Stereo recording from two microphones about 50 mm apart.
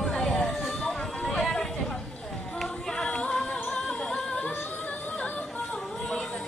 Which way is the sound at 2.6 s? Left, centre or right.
Centre.